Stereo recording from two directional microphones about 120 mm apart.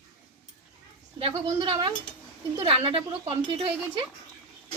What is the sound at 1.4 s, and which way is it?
Speech, 45° right (ahead or behind).